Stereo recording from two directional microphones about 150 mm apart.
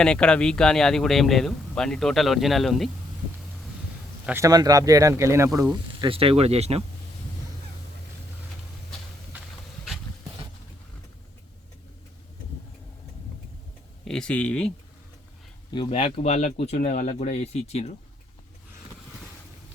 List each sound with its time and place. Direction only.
0.0 s speech: 5° left (ahead or behind)
4.3 s speech: 20° right (ahead or behind)
6.0 s speech: 40° right (ahead or behind)
14.0 s speech: 5° left (ahead or behind)
15.7 s speech: 35° left (ahead or behind)
16.9 s speech: 60° left (ahead or behind); by 17.9 s 45° left (ahead or behind)